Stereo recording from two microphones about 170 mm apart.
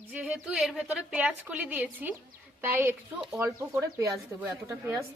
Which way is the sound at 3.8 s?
20° right (ahead or behind).